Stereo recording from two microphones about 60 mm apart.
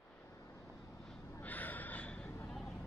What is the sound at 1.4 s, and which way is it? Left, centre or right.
Snort, left.